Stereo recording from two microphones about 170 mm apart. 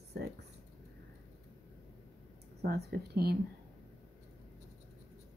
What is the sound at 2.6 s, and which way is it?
Speech, 65° right (ahead or behind).